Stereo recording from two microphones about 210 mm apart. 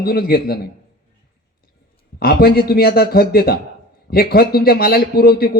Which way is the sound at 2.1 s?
45° left (ahead or behind).